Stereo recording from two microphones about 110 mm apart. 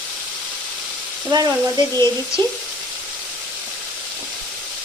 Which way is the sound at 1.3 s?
35° right (ahead or behind).